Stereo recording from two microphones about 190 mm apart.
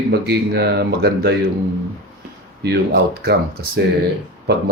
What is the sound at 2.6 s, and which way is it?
Speech, 60° right (ahead or behind).